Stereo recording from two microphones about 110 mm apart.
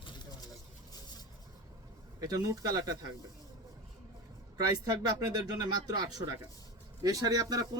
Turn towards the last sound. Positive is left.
turn(degrees=-35)  # may be behind; listen again after turning